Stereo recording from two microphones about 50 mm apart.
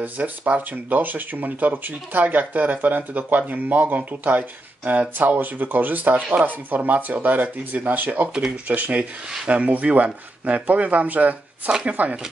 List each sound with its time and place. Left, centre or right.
0.2 s speech: right